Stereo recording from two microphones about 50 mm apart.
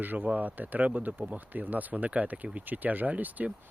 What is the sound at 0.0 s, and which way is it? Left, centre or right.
Speech, right.